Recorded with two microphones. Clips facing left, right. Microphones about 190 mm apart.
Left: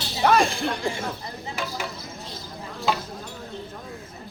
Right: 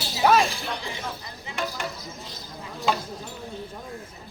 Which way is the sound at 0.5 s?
50° left (ahead or behind).